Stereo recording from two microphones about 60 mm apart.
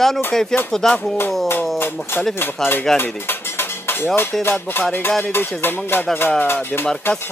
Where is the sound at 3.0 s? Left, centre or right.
Left.